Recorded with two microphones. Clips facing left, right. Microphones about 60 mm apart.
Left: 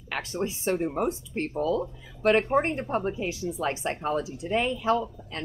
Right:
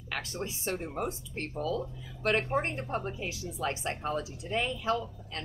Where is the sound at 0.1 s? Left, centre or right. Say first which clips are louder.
Left 6 dB; left.